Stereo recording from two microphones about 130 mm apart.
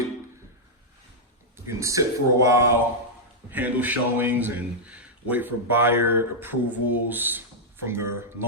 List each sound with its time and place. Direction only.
1.6 s speech: 25° right (ahead or behind)